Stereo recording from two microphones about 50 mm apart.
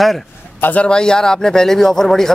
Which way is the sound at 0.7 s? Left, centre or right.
Centre.